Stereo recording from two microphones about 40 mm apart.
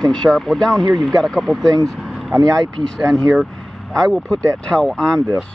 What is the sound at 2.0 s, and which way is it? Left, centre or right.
Vehicle, centre.